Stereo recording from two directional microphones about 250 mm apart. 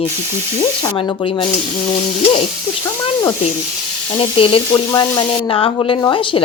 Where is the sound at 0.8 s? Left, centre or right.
Centre.